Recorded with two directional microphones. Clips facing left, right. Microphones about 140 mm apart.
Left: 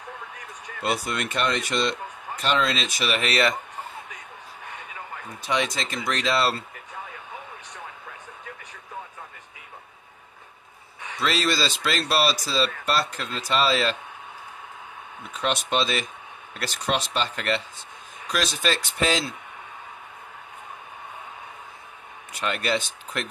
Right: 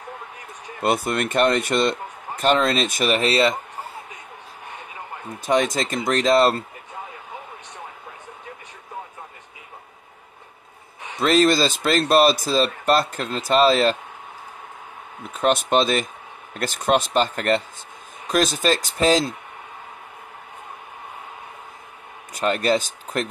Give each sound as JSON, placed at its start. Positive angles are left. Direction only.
{"t": 0.8, "sound": "speech", "side_deg": -50}
{"t": 3.2, "sound": "speech", "side_deg": -30}
{"t": 5.4, "sound": "speech", "side_deg": -45}
{"t": 11.1, "sound": "speech", "side_deg": -45}
{"t": 15.3, "sound": "speech", "side_deg": -50}
{"t": 22.3, "sound": "speech", "side_deg": -40}